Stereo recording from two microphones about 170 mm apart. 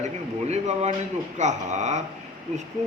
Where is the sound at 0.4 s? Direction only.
40° right (ahead or behind).